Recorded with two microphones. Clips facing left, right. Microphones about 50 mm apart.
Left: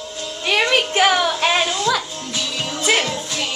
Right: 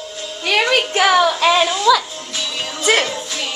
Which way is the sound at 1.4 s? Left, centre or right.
Right.